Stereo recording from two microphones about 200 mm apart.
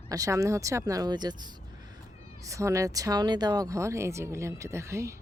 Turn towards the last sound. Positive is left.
turn(degrees=-15)  # may be behind; listen again after turning